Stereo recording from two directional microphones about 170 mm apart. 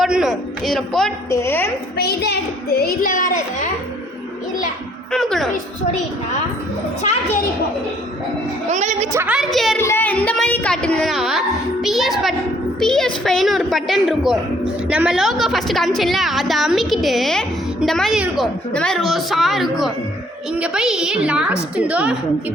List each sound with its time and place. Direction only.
0.0 s a woman's voice: centre (ahead or behind)
1.3 s a woman's voice: 15° left (ahead or behind)
2.0 s a woman's voice: 70° left (ahead or behind); by 3.7 s 50° left (ahead or behind)
5.1 s a woman's voice: 5° left (ahead or behind)
8.7 s a woman's voice: 45° right (ahead or behind)
9.1 s a woman's voice: 5° right (ahead or behind)
9.7 s a woman's voice: 15° left (ahead or behind); by 22.1 s 5° right (ahead or behind)